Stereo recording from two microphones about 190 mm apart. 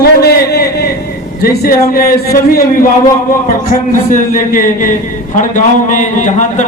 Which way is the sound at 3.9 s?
45° left (ahead or behind).